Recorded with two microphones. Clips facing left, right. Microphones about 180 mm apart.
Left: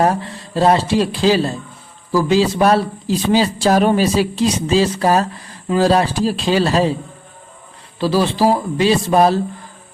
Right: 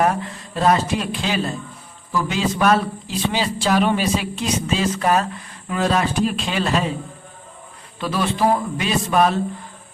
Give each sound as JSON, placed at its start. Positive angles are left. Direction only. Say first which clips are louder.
{"t": 0.0, "sound": "a man's voice", "louder": "left 3 dB", "side_deg": 30}
{"t": 7.9, "sound": "a man's voice", "louder": "left 6 dB", "side_deg": 30}